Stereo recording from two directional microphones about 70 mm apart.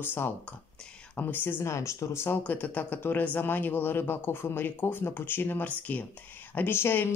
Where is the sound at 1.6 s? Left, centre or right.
Left.